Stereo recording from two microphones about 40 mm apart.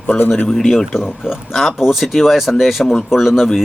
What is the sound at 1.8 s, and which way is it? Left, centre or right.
Speech, centre.